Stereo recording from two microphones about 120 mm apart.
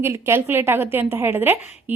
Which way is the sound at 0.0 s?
20° right (ahead or behind).